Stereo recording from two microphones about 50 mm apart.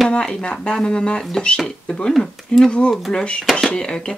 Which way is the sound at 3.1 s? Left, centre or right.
Centre.